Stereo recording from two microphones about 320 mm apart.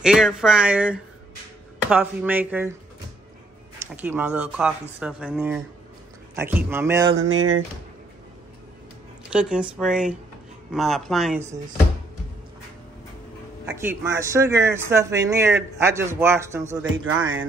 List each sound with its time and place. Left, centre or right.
0.0 s speech: centre
3.9 s speech: centre
7.2 s speech: right
9.3 s speech: centre
13.7 s speech: centre
16.8 s speech: right